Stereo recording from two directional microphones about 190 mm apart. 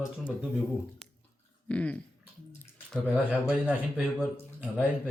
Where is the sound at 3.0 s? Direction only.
5° right (ahead or behind).